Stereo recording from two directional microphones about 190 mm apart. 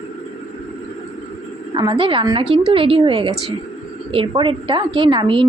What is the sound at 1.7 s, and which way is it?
Speech, 25° right (ahead or behind).